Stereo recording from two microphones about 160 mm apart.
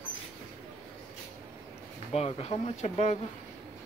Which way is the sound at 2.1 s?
40° left (ahead or behind).